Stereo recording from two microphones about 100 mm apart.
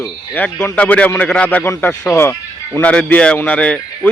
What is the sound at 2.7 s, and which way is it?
Speech, 15° left (ahead or behind).